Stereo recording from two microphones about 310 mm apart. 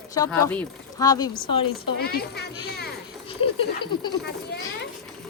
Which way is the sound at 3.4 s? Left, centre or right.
Centre.